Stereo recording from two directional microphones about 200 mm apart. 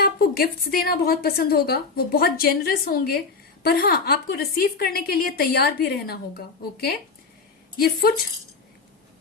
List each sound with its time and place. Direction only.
0.0 s a woman's voice: 50° left (ahead or behind)